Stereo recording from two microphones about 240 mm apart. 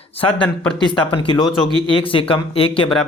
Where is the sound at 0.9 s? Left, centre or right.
Left.